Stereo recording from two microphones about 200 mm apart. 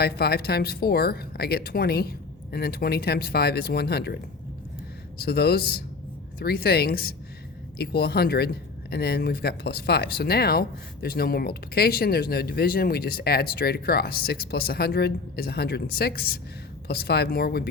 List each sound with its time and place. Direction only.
0.0 s speech: 50° left (ahead or behind)